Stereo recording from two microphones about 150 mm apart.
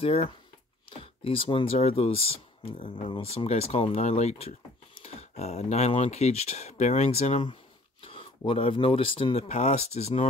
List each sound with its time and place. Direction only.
0.0 s speech: 40° left (ahead or behind)